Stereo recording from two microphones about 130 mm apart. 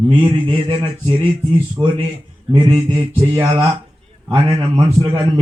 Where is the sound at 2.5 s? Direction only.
35° right (ahead or behind).